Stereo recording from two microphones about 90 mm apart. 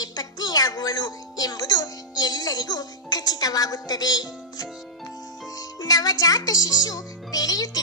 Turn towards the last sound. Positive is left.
turn(degrees=45)  # may be behind; listen again after turning